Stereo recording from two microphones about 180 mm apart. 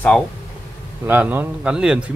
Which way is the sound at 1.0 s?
10° right (ahead or behind).